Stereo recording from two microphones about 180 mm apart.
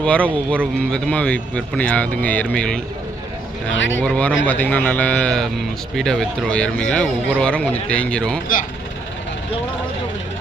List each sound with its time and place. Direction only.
0.0 s speech: 5° left (ahead or behind)
3.7 s speech: 90° left
4.0 s speech: 5° left (ahead or behind)